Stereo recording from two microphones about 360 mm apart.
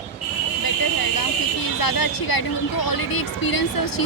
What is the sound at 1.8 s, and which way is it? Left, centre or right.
Speech, left.